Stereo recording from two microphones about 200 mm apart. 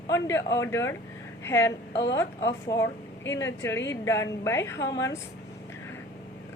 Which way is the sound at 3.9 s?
15° left (ahead or behind).